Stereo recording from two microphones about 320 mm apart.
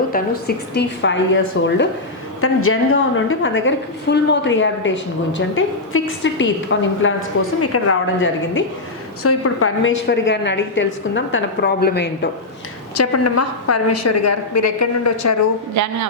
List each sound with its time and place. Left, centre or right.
0.1 s a woman's voice: left
13.0 s a woman's voice: left
15.8 s a woman's voice: right